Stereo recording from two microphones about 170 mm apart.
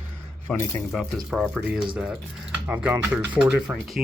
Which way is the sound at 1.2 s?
Centre (ahead or behind).